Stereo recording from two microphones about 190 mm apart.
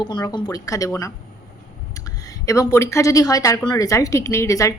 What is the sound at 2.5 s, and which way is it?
A woman's voice, 15° left (ahead or behind).